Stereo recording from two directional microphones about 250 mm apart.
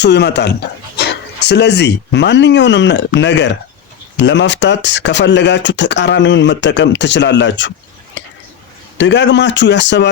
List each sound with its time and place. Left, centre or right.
0.0 s speech: left
9.0 s speech: left